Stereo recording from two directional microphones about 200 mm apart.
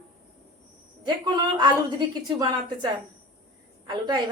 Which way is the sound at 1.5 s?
20° right (ahead or behind).